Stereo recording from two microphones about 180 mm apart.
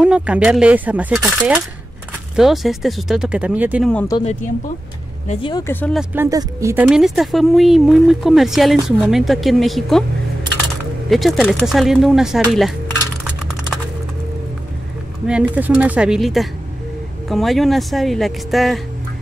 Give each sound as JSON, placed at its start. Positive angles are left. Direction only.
{"t": 0.0, "sound": "a woman's voice", "side_deg": -5}
{"t": 5.3, "sound": "speech", "side_deg": 30}
{"t": 5.6, "sound": "speech", "side_deg": 10}
{"t": 5.9, "sound": "a woman's voice", "side_deg": -15}
{"t": 11.1, "sound": "a woman's voice", "side_deg": 0}
{"t": 15.2, "sound": "a woman's voice", "side_deg": -5}